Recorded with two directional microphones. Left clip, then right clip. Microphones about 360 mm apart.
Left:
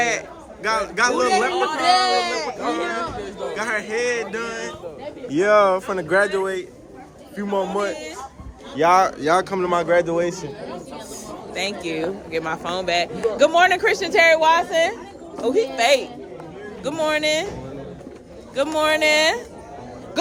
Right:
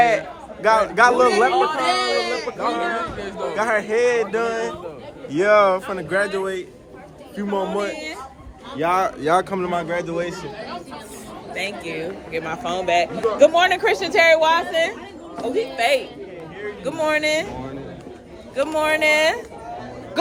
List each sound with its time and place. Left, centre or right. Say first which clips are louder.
0.0 s a man's voice: right 5 dB; centre
1.8 s speech: left 3 dB; centre
3.2 s chatter: right 2 dB; right
3.5 s a man's voice: right 5 dB; centre
11.5 s a man's voice: left 1 dB; centre
18.5 s a man's voice: even; centre